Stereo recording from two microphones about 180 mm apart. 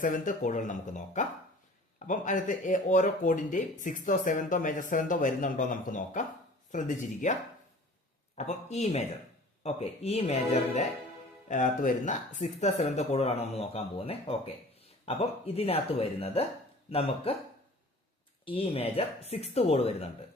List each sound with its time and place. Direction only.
0.0 s speech: 45° left (ahead or behind)
8.4 s speech: 40° left (ahead or behind)
11.4 s speech: 45° left (ahead or behind)
18.4 s speech: 30° left (ahead or behind)